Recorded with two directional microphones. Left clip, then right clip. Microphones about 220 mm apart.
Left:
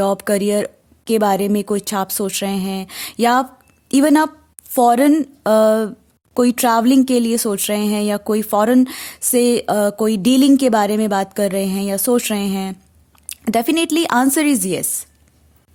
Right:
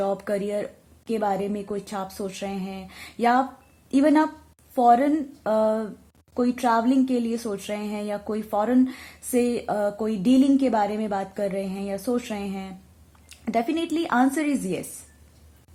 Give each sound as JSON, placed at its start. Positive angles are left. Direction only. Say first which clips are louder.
{"t": 0.0, "sound": "a woman's voice", "louder": "left 8 dB", "side_deg": 50}